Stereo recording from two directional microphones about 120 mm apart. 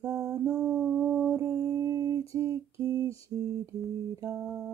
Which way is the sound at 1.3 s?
25° right (ahead or behind).